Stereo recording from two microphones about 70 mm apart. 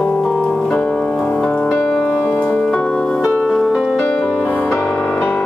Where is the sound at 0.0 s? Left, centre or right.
Centre.